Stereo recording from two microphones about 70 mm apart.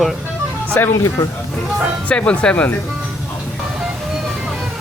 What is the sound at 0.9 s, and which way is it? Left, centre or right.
Speech, left.